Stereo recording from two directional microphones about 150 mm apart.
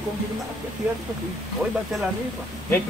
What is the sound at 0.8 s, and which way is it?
Speech, 10° right (ahead or behind).